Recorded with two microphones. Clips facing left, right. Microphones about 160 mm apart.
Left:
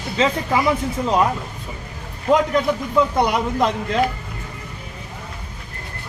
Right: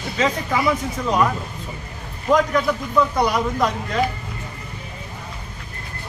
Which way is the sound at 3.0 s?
25° left (ahead or behind).